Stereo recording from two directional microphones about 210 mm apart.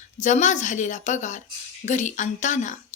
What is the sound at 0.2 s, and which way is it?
Speech, 35° left (ahead or behind).